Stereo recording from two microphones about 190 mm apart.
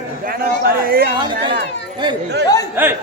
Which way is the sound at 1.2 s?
25° right (ahead or behind).